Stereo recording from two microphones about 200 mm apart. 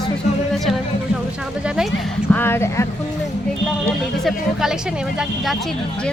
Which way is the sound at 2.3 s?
10° left (ahead or behind).